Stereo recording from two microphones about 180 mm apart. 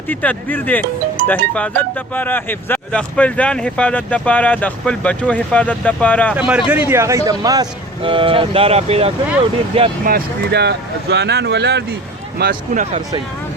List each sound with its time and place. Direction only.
0.1 s speech: 10° left (ahead or behind)
6.3 s speech: 5° right (ahead or behind); by 9.1 s 35° right (ahead or behind)
10.0 s speech: 55° right (ahead or behind)
12.4 s speech: 55° right (ahead or behind)